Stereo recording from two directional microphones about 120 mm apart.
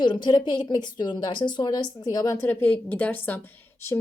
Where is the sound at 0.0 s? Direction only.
40° left (ahead or behind).